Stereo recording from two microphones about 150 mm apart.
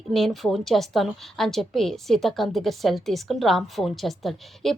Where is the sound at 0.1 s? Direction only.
Centre (ahead or behind).